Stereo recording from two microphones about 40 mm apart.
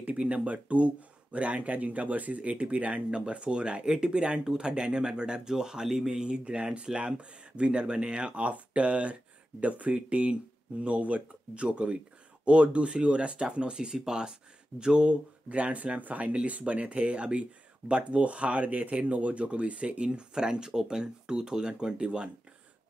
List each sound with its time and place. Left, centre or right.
0.0 s speech: right
15.4 s speech: right